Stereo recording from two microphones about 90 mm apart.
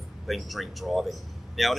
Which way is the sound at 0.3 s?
Centre (ahead or behind).